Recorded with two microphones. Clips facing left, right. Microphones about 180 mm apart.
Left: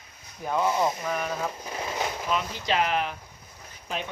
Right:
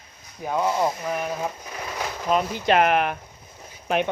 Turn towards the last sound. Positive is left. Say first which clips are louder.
# right 10 dB
turn(degrees=-65)  # may be behind; listen again after turning